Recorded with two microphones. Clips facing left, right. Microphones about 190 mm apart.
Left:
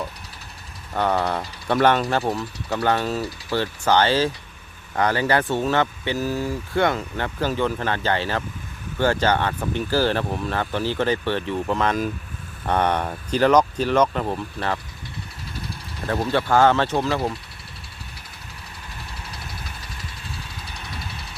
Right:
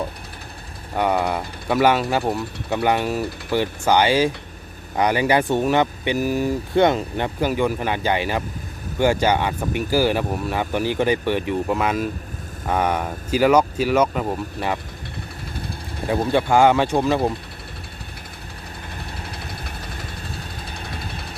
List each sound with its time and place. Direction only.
0.9 s speech: 10° right (ahead or behind)
16.0 s speech: 15° right (ahead or behind)
19.3 s vehicle: 55° right (ahead or behind)